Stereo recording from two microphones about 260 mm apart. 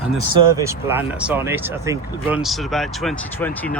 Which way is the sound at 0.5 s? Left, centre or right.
Centre.